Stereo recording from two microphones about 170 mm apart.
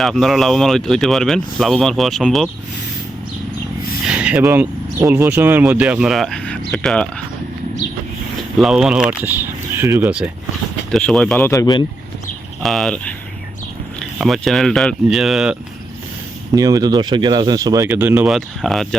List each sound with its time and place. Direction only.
0.0 s speech: centre (ahead or behind)
4.0 s a sound: 5° right (ahead or behind)
4.4 s speech: 15° right (ahead or behind); by 7.1 s 5° left (ahead or behind)
8.5 s speech: centre (ahead or behind)
10.9 s speech: 5° left (ahead or behind); by 11.9 s 25° left (ahead or behind)
12.6 s speech: centre (ahead or behind)
14.0 s speech: centre (ahead or behind)
16.6 s speech: 20° right (ahead or behind)
17.8 s speech: 10° right (ahead or behind)
18.3 s speech: centre (ahead or behind)